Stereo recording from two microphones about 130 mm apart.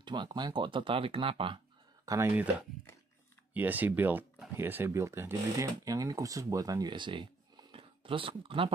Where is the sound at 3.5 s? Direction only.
15° right (ahead or behind).